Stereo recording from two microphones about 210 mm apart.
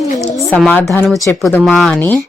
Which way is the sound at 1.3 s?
Centre (ahead or behind).